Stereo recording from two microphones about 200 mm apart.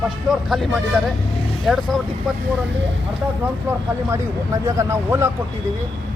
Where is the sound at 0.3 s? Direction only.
Centre (ahead or behind).